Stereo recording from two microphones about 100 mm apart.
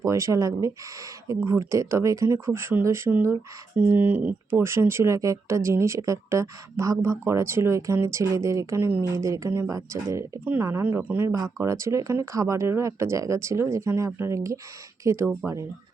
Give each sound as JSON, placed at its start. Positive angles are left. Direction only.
{"t": 0.0, "sound": "speech", "side_deg": -30}